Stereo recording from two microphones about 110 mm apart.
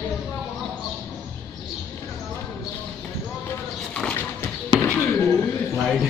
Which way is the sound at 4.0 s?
10° left (ahead or behind).